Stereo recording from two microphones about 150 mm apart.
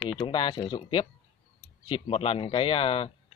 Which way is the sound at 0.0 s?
30° left (ahead or behind).